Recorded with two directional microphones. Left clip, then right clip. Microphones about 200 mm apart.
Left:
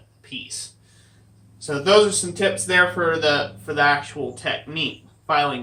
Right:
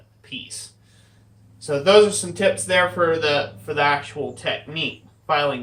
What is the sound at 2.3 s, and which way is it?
Speech, centre (ahead or behind).